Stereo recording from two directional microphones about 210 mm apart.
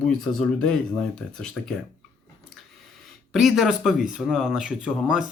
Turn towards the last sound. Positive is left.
turn(degrees=-5)  # may be behind; listen again after turning